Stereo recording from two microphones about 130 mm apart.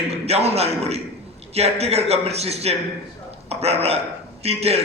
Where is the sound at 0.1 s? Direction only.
50° right (ahead or behind).